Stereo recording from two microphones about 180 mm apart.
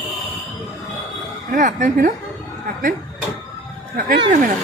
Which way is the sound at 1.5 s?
45° right (ahead or behind).